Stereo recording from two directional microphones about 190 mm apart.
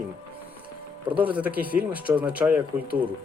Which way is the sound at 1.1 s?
10° right (ahead or behind).